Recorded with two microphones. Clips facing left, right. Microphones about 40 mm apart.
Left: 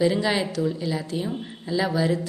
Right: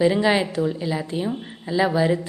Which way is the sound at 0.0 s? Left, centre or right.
Centre.